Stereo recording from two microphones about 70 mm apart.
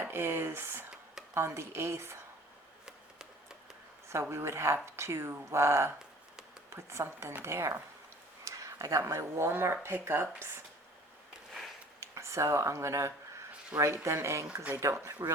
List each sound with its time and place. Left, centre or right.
0.1 s speech: right
2.8 s hands: centre
4.1 s speech: right
11.9 s speech: right